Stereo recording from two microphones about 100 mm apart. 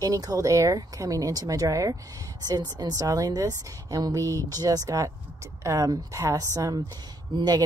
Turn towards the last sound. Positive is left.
turn(degrees=-45)  # may be behind; listen again after turning